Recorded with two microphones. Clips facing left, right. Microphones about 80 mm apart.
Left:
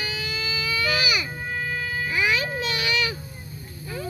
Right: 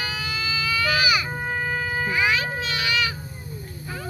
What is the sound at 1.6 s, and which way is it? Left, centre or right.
Shofar, right.